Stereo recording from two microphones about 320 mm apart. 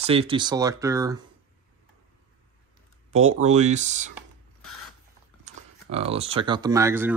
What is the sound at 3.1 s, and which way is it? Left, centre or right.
Speech, centre.